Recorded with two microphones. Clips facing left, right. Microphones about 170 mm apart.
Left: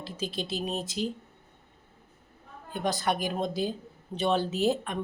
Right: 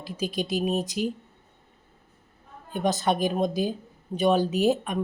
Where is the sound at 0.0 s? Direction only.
15° right (ahead or behind).